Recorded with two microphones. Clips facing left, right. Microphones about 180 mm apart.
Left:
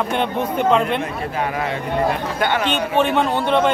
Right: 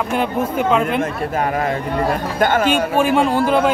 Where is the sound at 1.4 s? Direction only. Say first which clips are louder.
Right 3 dB; 45° right (ahead or behind).